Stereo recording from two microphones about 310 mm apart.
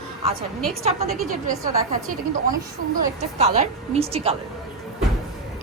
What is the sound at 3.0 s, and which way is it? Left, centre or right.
A woman's voice, right.